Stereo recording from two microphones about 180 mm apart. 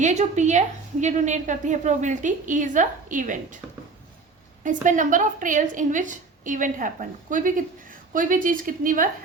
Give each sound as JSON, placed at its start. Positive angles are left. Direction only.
{"t": 0.0, "sound": "a woman's voice", "side_deg": -40}
{"t": 4.6, "sound": "a woman's voice", "side_deg": -45}